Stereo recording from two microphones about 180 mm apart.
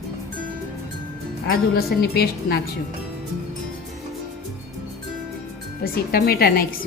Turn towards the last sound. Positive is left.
turn(degrees=55)  # may be behind; listen again after turning